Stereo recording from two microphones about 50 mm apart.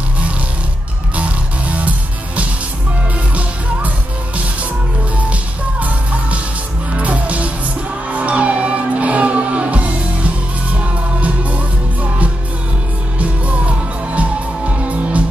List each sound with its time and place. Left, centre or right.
1.1 s music: right
5.8 s music: right